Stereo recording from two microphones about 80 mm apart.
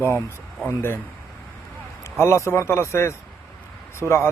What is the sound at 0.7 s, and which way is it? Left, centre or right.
Speech, left.